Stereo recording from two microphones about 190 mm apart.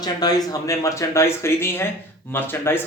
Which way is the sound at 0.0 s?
20° left (ahead or behind).